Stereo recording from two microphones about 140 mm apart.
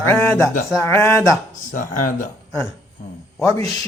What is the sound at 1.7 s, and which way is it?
Speech, 75° left (ahead or behind).